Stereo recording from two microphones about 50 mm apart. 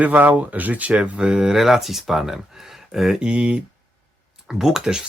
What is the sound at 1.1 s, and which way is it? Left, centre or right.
Speech, centre.